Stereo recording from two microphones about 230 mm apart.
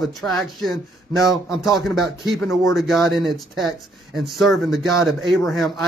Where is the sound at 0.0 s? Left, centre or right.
Centre.